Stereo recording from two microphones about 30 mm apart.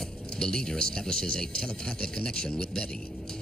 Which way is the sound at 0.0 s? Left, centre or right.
Left.